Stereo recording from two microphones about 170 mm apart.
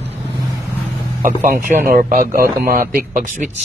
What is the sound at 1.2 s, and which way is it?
A man's voice, 50° right (ahead or behind).